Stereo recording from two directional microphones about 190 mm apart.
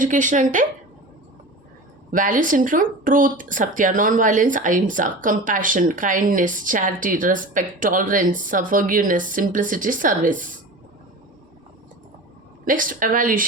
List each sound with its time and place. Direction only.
0.0 s speech: 40° right (ahead or behind)
2.0 s speech: 45° right (ahead or behind)
12.6 s speech: 45° right (ahead or behind)